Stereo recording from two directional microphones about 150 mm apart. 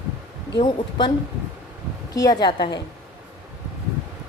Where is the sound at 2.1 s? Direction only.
25° left (ahead or behind).